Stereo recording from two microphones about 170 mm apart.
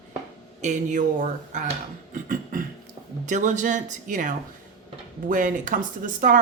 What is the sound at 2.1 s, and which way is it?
Beatboxing, 50° right (ahead or behind).